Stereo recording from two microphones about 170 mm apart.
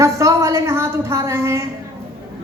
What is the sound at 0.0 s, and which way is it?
A woman's voice, 20° right (ahead or behind).